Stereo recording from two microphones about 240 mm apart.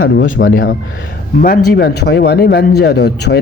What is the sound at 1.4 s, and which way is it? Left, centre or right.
A man's voice, left.